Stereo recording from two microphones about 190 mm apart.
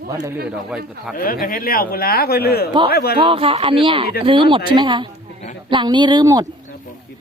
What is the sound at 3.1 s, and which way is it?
A woman's voice, 30° right (ahead or behind).